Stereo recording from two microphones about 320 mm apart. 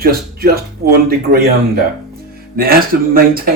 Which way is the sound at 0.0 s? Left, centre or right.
Right.